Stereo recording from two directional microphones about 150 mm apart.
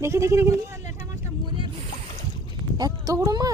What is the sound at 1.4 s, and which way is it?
Boat, 30° right (ahead or behind).